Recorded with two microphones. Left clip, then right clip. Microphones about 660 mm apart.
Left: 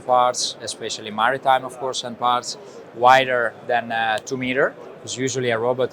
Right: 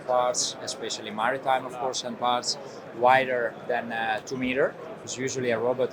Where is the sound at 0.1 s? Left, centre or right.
Left.